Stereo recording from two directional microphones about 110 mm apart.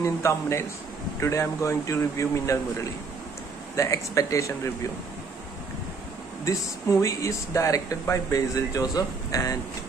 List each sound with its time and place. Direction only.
0.0 s speech: 25° left (ahead or behind)
6.4 s speech: 30° left (ahead or behind)